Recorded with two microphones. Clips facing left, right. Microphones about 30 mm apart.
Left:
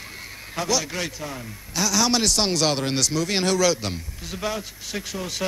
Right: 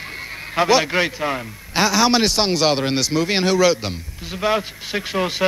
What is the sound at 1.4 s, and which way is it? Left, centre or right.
Speech, right.